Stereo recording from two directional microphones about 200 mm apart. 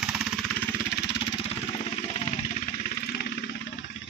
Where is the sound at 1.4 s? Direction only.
30° left (ahead or behind).